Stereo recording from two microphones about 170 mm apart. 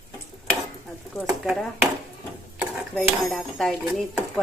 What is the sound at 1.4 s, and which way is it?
Speech, centre (ahead or behind).